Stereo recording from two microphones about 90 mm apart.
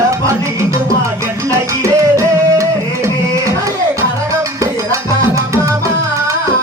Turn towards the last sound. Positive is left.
turn(degrees=-35)  # may be behind; listen again after turning